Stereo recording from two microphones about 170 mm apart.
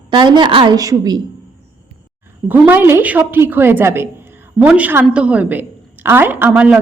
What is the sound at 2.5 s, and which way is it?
A woman's voice, 10° right (ahead or behind).